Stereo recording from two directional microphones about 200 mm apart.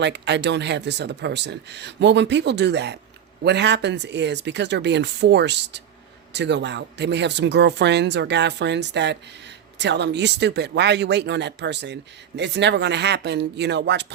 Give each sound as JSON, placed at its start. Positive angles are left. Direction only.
{"t": 0.0, "sound": "speech", "side_deg": -60}